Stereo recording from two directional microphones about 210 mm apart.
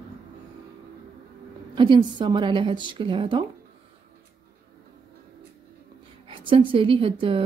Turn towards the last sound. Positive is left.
turn(degrees=-25)  # may be behind; listen again after turning